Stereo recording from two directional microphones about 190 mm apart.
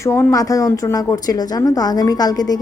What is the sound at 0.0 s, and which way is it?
A woman's voice, 15° left (ahead or behind).